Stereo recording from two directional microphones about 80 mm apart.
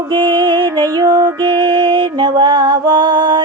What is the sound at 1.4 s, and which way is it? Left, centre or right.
Music, right.